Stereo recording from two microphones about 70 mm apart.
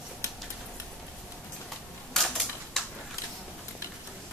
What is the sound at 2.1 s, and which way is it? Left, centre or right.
Typewriter, centre.